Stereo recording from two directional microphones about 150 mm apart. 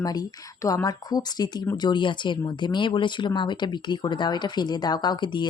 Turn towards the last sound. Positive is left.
turn(degrees=30)  # may be behind; listen again after turning